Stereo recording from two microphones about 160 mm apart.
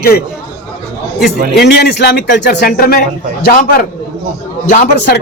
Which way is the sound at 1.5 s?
90° left.